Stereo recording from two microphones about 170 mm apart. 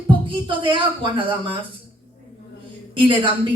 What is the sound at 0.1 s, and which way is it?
Speech, 30° right (ahead or behind).